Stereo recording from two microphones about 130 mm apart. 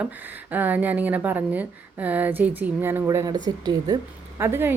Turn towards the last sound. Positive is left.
turn(degrees=-20)  # may be behind; listen again after turning